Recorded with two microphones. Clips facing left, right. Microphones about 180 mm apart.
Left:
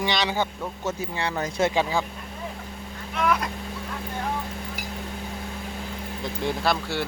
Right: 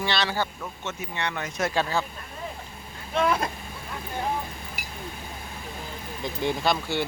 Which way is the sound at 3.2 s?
30° right (ahead or behind).